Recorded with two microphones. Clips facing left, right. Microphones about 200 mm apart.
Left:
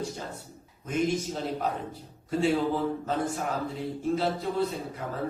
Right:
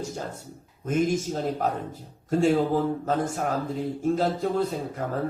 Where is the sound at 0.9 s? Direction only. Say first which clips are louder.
Right 3 dB; 45° right (ahead or behind).